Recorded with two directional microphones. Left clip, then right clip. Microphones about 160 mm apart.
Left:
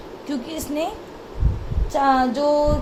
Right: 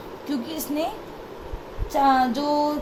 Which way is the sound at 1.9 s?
50° left (ahead or behind).